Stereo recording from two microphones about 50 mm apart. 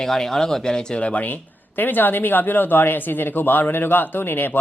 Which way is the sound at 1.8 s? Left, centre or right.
Left.